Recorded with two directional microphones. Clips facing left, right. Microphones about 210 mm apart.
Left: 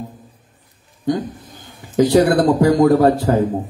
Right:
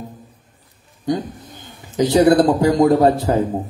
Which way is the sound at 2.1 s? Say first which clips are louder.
Right 2 dB; 20° right (ahead or behind).